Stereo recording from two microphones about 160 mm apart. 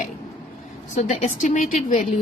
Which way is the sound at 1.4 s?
55° left (ahead or behind).